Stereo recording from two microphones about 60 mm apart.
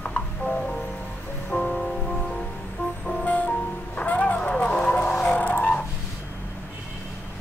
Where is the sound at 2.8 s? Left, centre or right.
Left.